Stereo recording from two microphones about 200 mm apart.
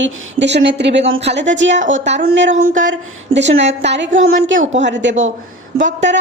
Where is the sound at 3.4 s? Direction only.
65° right (ahead or behind).